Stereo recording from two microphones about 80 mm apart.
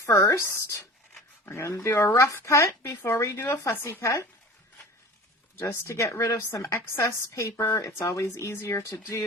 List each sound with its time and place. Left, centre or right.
0.0 s speech: left
5.6 s speech: left